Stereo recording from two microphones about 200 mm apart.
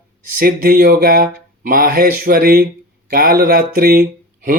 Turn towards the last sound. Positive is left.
turn(degrees=-45)  # may be behind; listen again after turning